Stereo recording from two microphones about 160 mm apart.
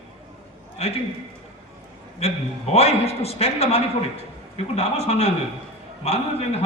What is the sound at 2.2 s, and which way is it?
A man's voice, 40° left (ahead or behind).